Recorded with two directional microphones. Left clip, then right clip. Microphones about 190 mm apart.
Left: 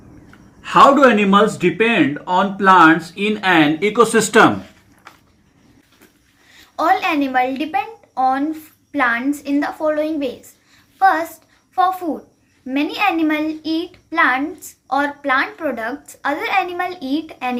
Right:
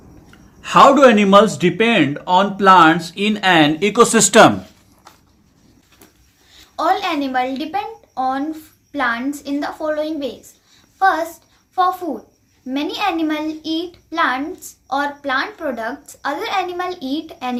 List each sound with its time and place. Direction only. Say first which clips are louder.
0.6 s speech: right 1 dB; 55° right (ahead or behind)
6.7 s a woman's voice: left 2 dB; centre (ahead or behind)